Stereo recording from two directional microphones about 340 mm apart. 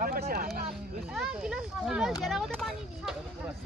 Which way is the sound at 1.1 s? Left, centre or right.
Centre.